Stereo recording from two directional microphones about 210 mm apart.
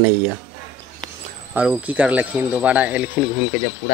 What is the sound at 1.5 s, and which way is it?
Speech, 5° right (ahead or behind).